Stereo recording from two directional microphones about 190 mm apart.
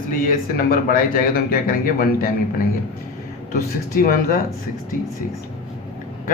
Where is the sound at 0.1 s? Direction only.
50° left (ahead or behind).